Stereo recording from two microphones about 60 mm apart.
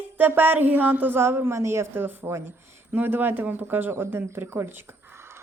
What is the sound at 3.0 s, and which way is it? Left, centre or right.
Speech, right.